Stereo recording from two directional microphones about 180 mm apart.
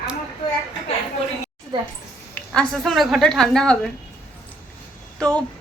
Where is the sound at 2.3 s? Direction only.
5° left (ahead or behind).